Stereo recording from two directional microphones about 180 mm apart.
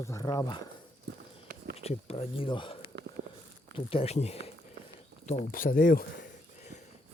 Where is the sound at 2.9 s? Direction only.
75° right (ahead or behind).